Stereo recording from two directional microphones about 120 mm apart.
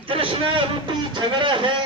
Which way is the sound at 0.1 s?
50° right (ahead or behind).